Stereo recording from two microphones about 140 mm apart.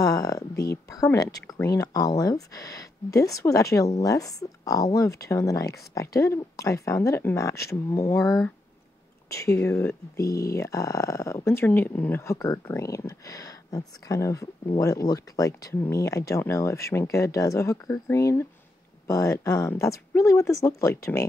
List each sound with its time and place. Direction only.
0.0 s speech: 25° left (ahead or behind)